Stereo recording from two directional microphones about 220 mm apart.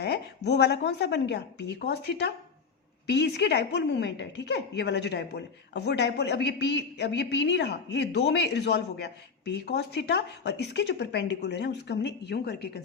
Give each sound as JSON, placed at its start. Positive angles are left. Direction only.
{"t": 0.0, "sound": "a woman's voice", "side_deg": 50}